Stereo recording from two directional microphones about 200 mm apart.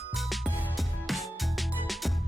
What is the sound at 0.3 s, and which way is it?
Music, centre (ahead or behind).